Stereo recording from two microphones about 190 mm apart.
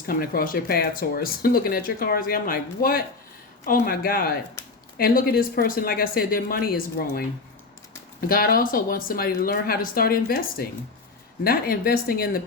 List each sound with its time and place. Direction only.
0.0 s speech: 50° left (ahead or behind)
8.3 s speech: 50° left (ahead or behind)